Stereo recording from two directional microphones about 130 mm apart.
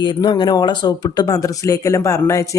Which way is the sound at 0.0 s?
35° left (ahead or behind).